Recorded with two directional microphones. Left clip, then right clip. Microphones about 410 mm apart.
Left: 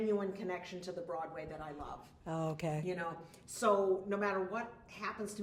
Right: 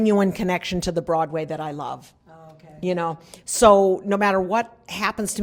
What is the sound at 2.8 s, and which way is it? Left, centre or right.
A woman's voice, right.